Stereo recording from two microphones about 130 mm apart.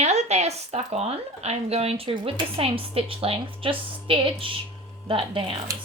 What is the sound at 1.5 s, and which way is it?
Speech, 50° right (ahead or behind).